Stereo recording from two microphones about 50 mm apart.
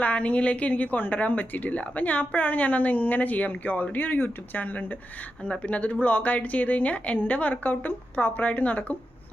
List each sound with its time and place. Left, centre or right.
0.0 s a woman's voice: left